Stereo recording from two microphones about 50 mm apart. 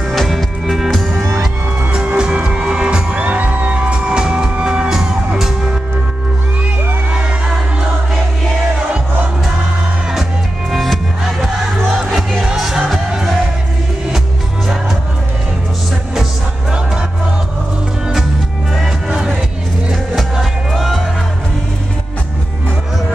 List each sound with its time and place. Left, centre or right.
0.1 s music: centre
1.9 s music: right
10.7 s music: centre
11.9 s crowd: centre
18.8 s music: centre